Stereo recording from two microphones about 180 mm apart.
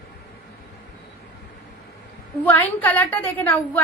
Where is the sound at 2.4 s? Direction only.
10° left (ahead or behind).